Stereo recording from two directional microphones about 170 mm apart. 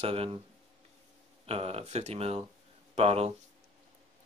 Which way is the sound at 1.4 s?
35° right (ahead or behind).